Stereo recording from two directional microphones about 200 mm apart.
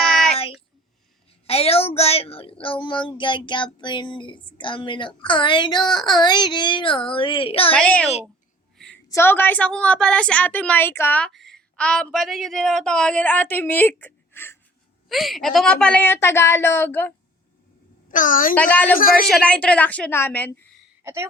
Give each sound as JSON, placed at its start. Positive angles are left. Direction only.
{"t": 0.0, "sound": "child singing", "side_deg": 0}
{"t": 1.5, "sound": "speech", "side_deg": 30}
{"t": 7.7, "sound": "a woman's voice", "side_deg": 5}
{"t": 15.1, "sound": "a woman's voice", "side_deg": 0}
{"t": 18.1, "sound": "a child's voice", "side_deg": 40}
{"t": 18.5, "sound": "a woman's voice", "side_deg": 10}
{"t": 18.9, "sound": "speech", "side_deg": 45}
{"t": 19.3, "sound": "a woman's voice", "side_deg": 5}
{"t": 21.0, "sound": "speech", "side_deg": -15}